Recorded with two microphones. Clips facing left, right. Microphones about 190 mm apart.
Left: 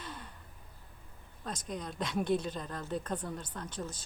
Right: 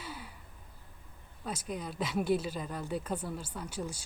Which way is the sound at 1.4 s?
10° right (ahead or behind).